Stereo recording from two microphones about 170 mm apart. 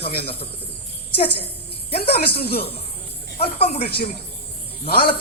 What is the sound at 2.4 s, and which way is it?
Speech, 70° left (ahead or behind).